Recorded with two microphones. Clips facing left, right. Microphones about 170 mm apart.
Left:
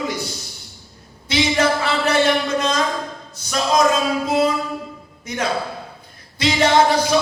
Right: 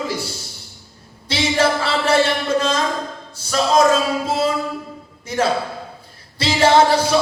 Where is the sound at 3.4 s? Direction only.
30° right (ahead or behind).